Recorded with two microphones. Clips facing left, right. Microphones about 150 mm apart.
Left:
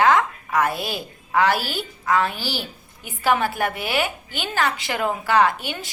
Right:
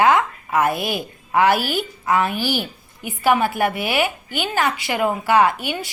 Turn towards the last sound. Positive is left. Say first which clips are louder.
# right 2 dB
turn(degrees=-15)  # may be behind; listen again after turning